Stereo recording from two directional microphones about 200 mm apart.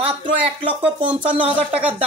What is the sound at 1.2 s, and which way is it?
Speech, 5° right (ahead or behind).